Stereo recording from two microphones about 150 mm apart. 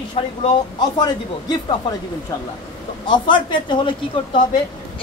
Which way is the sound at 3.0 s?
30° left (ahead or behind).